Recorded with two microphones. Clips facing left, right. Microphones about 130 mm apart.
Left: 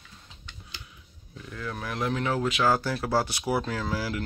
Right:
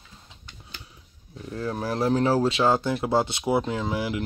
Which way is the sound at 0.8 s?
35° right (ahead or behind).